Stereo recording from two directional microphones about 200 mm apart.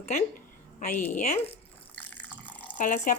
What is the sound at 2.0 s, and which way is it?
Water, 10° left (ahead or behind).